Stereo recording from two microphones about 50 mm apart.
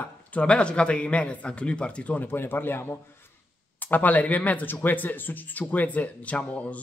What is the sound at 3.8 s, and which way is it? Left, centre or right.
Speech, left.